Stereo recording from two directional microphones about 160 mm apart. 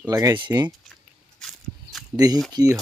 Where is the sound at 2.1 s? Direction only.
25° right (ahead or behind).